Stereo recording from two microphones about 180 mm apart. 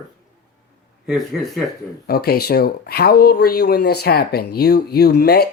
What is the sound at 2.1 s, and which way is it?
Speech, 60° left (ahead or behind).